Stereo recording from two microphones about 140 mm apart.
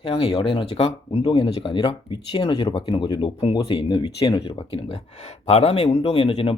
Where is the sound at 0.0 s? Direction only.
45° left (ahead or behind).